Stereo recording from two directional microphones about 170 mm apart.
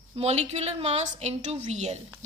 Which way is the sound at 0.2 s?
40° right (ahead or behind).